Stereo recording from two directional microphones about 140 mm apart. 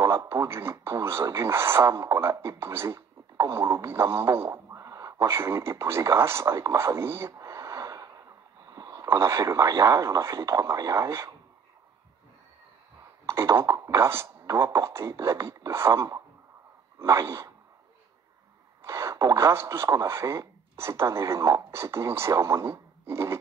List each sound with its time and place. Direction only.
0.0 s speech: 20° right (ahead or behind)
8.6 s a sound: 25° right (ahead or behind)
9.0 s speech: 20° right (ahead or behind)
13.3 s speech: 20° right (ahead or behind)
18.8 s speech: 20° right (ahead or behind)